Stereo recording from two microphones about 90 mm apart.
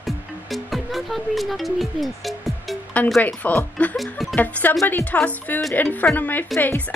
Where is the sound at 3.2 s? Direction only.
20° left (ahead or behind).